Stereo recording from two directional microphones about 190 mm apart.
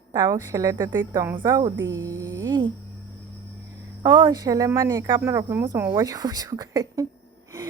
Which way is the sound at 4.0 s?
25° right (ahead or behind).